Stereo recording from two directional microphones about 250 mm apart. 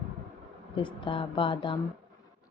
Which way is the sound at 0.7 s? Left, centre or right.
Centre.